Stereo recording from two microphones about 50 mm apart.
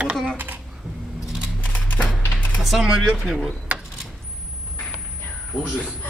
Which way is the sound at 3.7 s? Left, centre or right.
Right.